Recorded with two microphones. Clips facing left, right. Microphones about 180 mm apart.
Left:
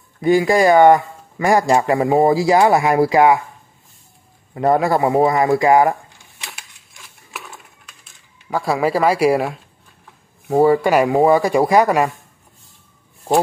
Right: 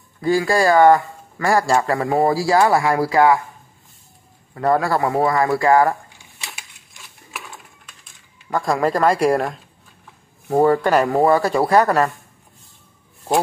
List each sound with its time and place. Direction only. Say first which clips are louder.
0.2 s a man's voice: left 3 dB; 20° left (ahead or behind)
4.6 s a man's voice: left 3 dB; 20° left (ahead or behind)
8.0 s speech: even; 5° left (ahead or behind)